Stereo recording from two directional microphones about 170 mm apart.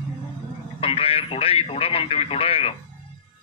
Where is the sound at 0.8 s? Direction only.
35° left (ahead or behind).